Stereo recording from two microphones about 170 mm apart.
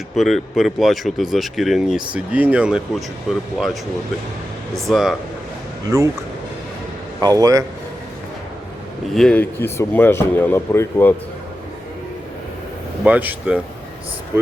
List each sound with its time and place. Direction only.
0.2 s speech: centre (ahead or behind)
4.7 s speech: centre (ahead or behind)
5.9 s speech: 20° right (ahead or behind)
7.2 s speech: 20° right (ahead or behind)
9.1 s speech: 5° left (ahead or behind)
13.1 s speech: 10° right (ahead or behind)